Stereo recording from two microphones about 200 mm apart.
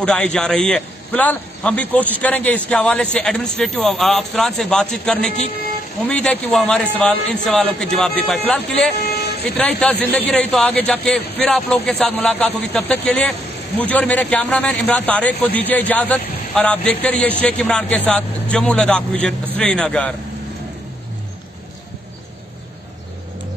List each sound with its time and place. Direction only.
0.0 s speech: 5° left (ahead or behind)
9.0 s vehicle: 55° left (ahead or behind)
9.6 s speech: 5° left (ahead or behind)